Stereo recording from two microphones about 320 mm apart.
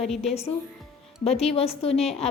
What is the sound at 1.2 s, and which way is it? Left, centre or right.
Speech, centre.